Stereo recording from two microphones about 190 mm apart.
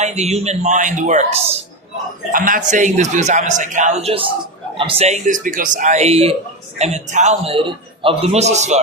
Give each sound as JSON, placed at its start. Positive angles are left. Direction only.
{"t": 0.0, "sound": "a man's voice", "side_deg": -35}
{"t": 2.3, "sound": "a man's voice", "side_deg": -45}